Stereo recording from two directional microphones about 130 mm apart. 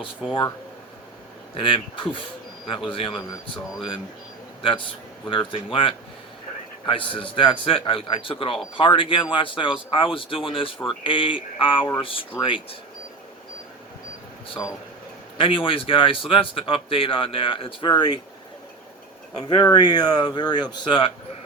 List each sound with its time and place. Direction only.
1.5 s speech: 40° left (ahead or behind)
5.3 s speech: 40° left (ahead or behind)
15.4 s speech: 45° left (ahead or behind)
19.4 s speech: 35° left (ahead or behind)